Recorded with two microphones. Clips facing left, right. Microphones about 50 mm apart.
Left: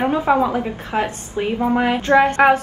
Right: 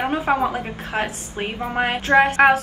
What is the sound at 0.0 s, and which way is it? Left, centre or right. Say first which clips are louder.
A woman's voice: left 3 dB; centre.